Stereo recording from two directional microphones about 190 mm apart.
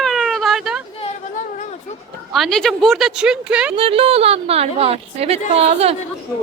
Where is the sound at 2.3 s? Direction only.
Centre (ahead or behind).